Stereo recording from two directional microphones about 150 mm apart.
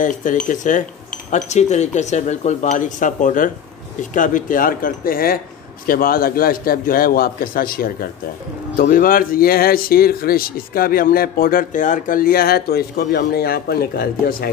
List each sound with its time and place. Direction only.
0.0 s a man's voice: 60° left (ahead or behind); by 14.5 s 90° left